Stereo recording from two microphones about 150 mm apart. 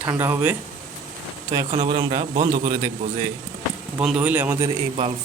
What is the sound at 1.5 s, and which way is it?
Speech, 25° right (ahead or behind).